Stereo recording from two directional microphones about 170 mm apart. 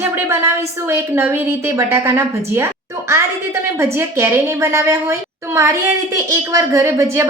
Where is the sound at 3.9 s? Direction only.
15° right (ahead or behind).